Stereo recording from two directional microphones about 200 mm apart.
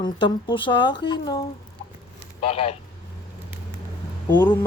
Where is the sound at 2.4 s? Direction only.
30° left (ahead or behind).